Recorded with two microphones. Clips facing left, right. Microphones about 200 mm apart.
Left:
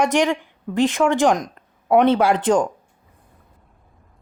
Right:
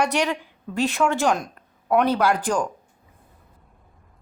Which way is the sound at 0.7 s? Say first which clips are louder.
Left 4 dB; 15° left (ahead or behind).